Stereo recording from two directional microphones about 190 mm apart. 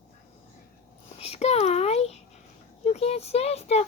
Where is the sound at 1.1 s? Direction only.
35° left (ahead or behind).